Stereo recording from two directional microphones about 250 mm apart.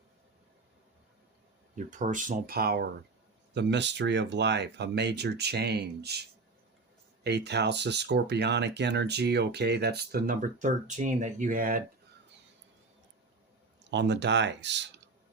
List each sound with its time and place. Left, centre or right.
1.7 s speech: right
7.3 s speech: right
13.9 s speech: right